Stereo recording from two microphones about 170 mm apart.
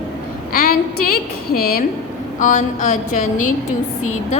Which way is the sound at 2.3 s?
50° left (ahead or behind).